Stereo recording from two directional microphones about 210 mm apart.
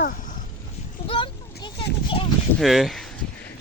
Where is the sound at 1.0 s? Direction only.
25° left (ahead or behind).